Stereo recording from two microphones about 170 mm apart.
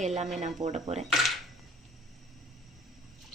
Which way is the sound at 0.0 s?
40° right (ahead or behind).